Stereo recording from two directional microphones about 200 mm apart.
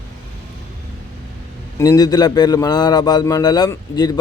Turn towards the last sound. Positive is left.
turn(degrees=20)  # may be behind; listen again after turning